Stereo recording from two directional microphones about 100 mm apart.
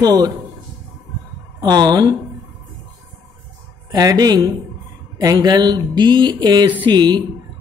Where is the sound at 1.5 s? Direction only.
45° right (ahead or behind).